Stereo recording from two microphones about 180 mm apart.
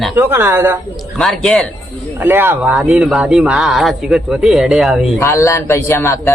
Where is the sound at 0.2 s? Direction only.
15° right (ahead or behind).